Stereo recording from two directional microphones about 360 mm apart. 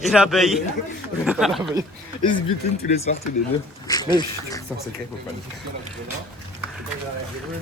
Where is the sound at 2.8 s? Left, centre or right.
Centre.